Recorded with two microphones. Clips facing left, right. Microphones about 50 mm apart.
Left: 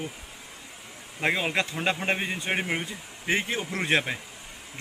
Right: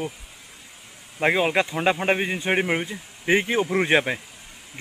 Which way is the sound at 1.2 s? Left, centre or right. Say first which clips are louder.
Right 5 dB; centre.